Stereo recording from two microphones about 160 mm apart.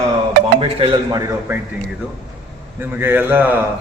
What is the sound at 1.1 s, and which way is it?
Speech, 20° right (ahead or behind).